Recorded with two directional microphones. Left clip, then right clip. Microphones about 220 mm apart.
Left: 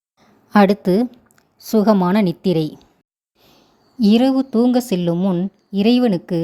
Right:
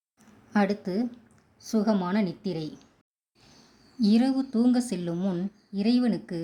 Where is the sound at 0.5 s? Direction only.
40° left (ahead or behind).